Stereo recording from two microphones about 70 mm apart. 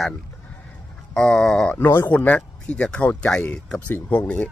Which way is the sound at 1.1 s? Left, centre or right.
Centre.